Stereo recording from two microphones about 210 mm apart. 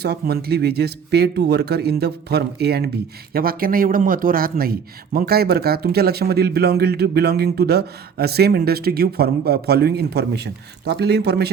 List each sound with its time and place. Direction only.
0.0 s speech: 50° right (ahead or behind)